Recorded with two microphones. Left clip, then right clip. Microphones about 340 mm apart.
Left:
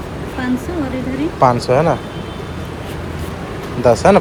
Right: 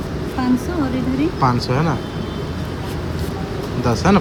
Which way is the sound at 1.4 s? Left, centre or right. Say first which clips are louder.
Left 10 dB; centre.